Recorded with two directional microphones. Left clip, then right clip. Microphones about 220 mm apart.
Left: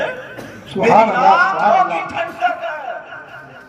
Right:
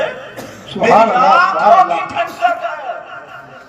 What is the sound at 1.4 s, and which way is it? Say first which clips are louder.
Music: right 4 dB; 20° left (ahead or behind).